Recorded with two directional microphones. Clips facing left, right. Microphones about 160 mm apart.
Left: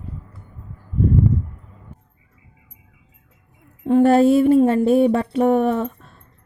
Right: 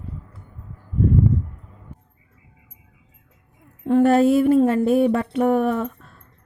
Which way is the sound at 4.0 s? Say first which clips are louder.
Left 2 dB; 30° left (ahead or behind).